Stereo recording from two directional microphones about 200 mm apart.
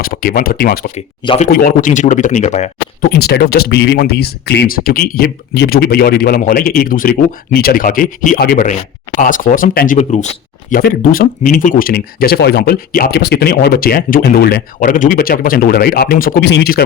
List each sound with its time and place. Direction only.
0.0 s speech: 45° left (ahead or behind)
0.9 s speech: 30° left (ahead or behind)
1.5 s speech: 45° left (ahead or behind)
3.2 s speech: 50° left (ahead or behind)
10.7 s speech: 45° left (ahead or behind)